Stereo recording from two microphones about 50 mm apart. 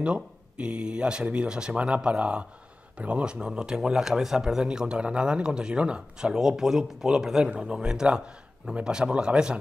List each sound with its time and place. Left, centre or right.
0.0 s speech: right
7.5 s speech: centre